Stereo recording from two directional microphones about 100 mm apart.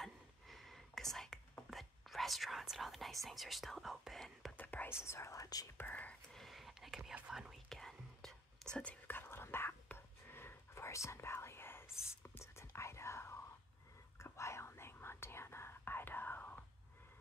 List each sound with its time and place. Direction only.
0.0 s whispering: centre (ahead or behind)
3.3 s speech: centre (ahead or behind)
4.6 s whispering: 15° left (ahead or behind)
5.0 s speech: 30° left (ahead or behind)
5.8 s speech: 15° left (ahead or behind)
6.3 s whispering: centre (ahead or behind)
8.7 s whispering: 15° left (ahead or behind)